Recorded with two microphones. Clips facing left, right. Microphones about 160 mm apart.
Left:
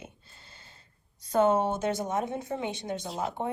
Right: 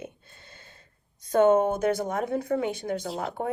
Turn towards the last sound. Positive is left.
turn(degrees=25)  # may be behind; listen again after turning